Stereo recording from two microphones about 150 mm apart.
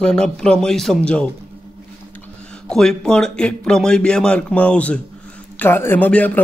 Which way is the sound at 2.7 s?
5° left (ahead or behind).